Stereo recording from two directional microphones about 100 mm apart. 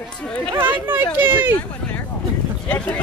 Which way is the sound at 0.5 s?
20° right (ahead or behind).